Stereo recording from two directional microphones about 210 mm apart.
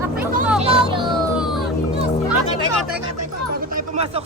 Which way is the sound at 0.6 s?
25° right (ahead or behind).